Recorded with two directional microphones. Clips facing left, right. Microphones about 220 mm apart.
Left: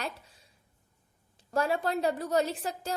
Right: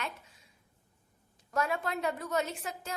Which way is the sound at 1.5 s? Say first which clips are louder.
Left 4 dB; 30° left (ahead or behind).